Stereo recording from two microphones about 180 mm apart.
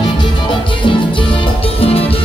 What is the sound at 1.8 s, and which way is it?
Music, 35° left (ahead or behind).